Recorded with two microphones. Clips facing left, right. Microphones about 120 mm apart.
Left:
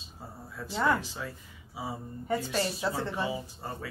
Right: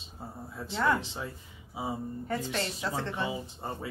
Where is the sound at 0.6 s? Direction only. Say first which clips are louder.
Even; 25° right (ahead or behind).